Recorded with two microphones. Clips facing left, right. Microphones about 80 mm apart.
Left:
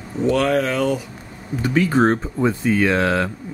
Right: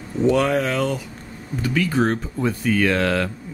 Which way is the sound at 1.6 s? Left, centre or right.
Left.